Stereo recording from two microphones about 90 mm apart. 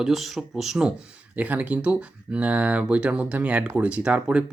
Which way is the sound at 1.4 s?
15° right (ahead or behind).